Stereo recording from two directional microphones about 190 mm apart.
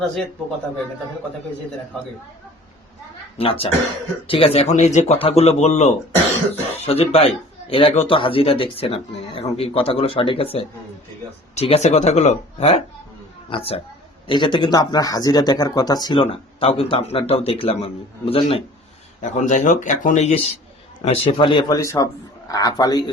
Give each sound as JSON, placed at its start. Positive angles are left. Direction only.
{"t": 3.3, "sound": "speech", "side_deg": 30}
{"t": 21.6, "sound": "speech", "side_deg": 15}